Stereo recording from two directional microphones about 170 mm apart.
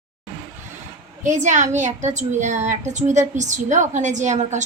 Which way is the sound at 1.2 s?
45° right (ahead or behind).